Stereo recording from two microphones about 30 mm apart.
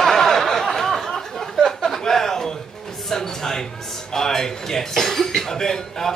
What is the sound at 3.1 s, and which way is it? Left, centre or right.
Music, centre.